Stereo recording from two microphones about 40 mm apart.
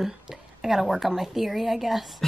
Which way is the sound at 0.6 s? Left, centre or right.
Centre.